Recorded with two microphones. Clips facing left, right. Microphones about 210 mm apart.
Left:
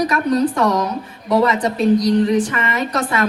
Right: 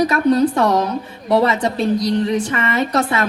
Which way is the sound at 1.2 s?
30° right (ahead or behind).